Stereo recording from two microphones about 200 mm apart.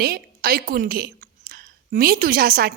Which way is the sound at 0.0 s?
45° right (ahead or behind).